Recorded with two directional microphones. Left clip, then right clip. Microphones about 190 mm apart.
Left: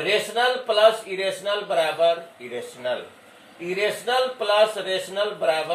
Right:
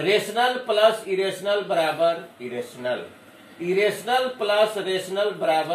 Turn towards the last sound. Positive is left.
turn(degrees=0)  # may be behind; listen again after turning